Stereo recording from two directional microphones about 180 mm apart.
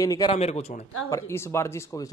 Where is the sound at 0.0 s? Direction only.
20° left (ahead or behind).